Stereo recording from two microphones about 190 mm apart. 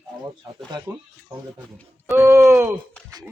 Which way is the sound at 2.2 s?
15° right (ahead or behind).